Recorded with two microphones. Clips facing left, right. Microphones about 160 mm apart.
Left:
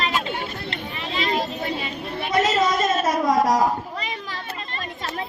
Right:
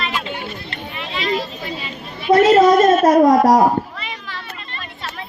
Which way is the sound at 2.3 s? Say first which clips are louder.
Right 10 dB; 55° right (ahead or behind).